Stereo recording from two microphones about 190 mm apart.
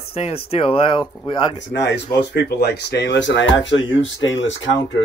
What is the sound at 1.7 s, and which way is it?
Speech, 65° left (ahead or behind).